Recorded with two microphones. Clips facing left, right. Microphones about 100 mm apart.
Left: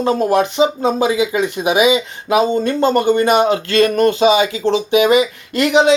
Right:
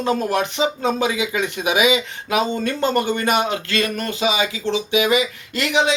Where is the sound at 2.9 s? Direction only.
50° left (ahead or behind).